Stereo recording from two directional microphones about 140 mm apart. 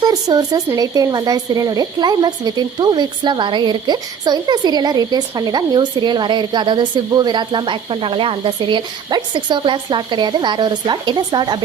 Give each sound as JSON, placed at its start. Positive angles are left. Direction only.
{"t": 0.0, "sound": "speech", "side_deg": -30}